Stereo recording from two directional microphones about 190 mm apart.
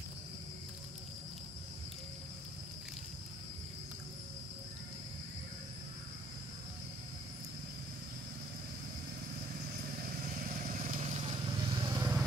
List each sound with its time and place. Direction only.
10.7 s vehicle: 40° right (ahead or behind); by 12.1 s 25° right (ahead or behind)